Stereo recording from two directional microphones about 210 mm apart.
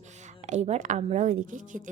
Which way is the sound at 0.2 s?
35° right (ahead or behind).